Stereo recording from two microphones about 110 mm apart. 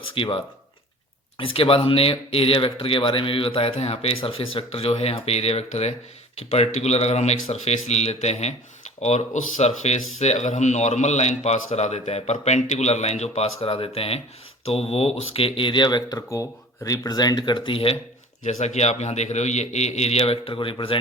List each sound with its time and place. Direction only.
0.1 s a man's voice: 55° left (ahead or behind)
18.4 s a man's voice: 90° left; by 21.0 s 50° left (ahead or behind)